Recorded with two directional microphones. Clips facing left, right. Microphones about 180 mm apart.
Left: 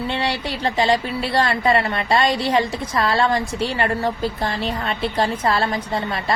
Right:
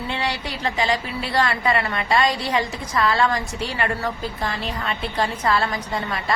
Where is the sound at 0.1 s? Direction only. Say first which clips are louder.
Left 3 dB; 30° left (ahead or behind).